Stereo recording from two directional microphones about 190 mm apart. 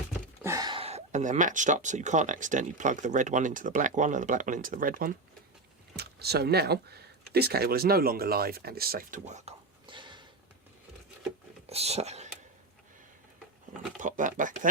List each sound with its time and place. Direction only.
0.4 s speech: 20° right (ahead or behind)
11.6 s speech: 35° right (ahead or behind)
14.0 s speech: 40° right (ahead or behind)